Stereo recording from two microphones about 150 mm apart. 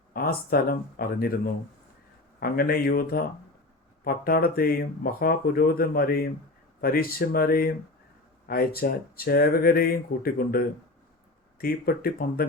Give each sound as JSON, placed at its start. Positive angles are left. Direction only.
{"t": 0.1, "sound": "speech", "side_deg": 90}
{"t": 2.4, "sound": "speech", "side_deg": 75}